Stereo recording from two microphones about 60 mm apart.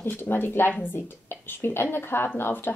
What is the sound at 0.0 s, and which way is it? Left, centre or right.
A woman's voice, left.